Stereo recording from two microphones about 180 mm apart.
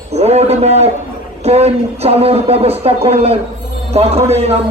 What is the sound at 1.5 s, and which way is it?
Speech, 35° right (ahead or behind).